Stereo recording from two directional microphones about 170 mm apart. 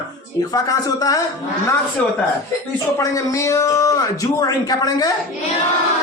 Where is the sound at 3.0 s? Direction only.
20° left (ahead or behind).